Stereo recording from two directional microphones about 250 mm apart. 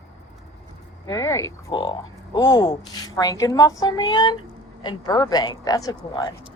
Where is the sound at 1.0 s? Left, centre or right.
Centre.